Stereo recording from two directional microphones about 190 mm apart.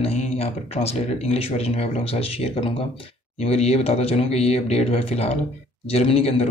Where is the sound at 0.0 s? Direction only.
35° left (ahead or behind).